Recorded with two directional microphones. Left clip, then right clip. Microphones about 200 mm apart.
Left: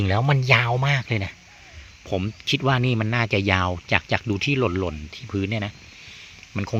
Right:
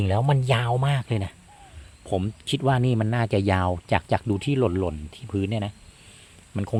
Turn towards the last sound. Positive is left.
turn(degrees=-5)  # may be behind; listen again after turning